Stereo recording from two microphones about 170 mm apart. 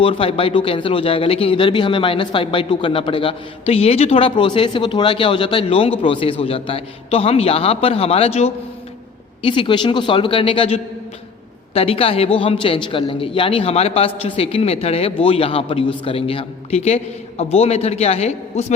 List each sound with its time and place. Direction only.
0.0 s speech: 30° left (ahead or behind)